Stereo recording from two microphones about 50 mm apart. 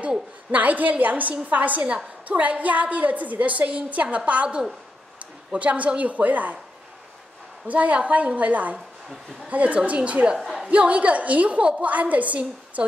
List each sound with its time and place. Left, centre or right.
0.0 s a woman's voice: right
7.6 s a woman's voice: right
10.3 s a sound: centre
10.7 s a woman's voice: right